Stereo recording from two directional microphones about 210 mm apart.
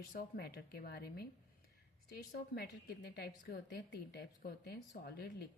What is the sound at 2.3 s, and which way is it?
A woman's voice, 50° left (ahead or behind).